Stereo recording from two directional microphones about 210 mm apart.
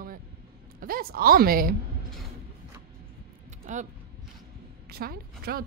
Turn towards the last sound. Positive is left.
turn(degrees=-45)  # may be behind; listen again after turning